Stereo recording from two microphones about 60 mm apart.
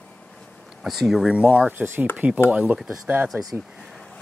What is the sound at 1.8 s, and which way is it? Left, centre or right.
Speech, right.